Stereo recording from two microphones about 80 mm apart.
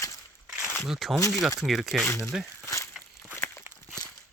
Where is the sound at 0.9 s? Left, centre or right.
Centre.